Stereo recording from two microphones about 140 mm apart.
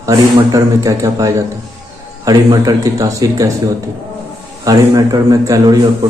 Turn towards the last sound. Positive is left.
turn(degrees=-25)  # may be behind; listen again after turning